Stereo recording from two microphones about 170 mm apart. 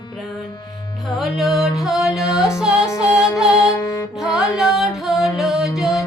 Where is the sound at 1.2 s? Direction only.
Centre (ahead or behind).